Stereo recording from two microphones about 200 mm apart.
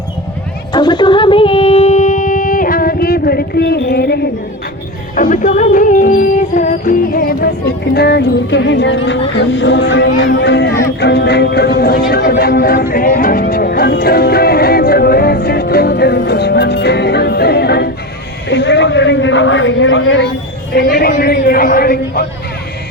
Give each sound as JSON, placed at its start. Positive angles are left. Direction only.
{"t": 0.7, "sound": "music", "side_deg": 20}
{"t": 5.1, "sound": "music", "side_deg": 40}
{"t": 18.4, "sound": "a man's voice", "side_deg": 60}
{"t": 20.7, "sound": "a man's voice", "side_deg": 50}